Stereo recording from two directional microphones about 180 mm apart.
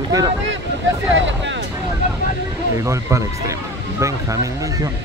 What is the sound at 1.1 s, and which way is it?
Vehicle, 90° right.